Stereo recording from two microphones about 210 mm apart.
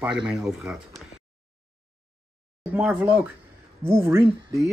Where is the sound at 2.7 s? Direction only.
10° right (ahead or behind).